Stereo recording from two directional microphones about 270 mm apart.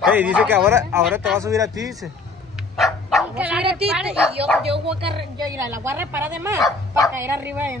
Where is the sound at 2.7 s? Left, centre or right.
Centre.